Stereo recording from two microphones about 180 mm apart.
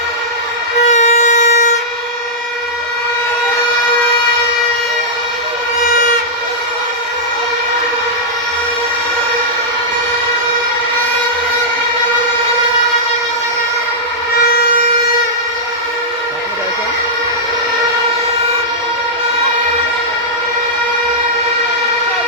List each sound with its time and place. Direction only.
0.9 s violin: 40° left (ahead or behind)